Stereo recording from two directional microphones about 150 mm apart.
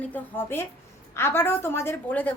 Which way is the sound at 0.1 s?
15° left (ahead or behind).